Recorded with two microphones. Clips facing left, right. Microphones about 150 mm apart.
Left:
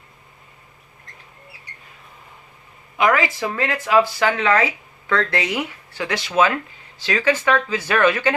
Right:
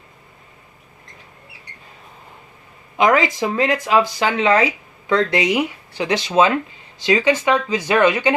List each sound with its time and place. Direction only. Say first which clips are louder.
3.0 s speech: right 3 dB; 20° right (ahead or behind)